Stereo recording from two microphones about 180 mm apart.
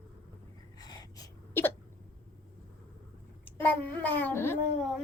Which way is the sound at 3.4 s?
10° left (ahead or behind).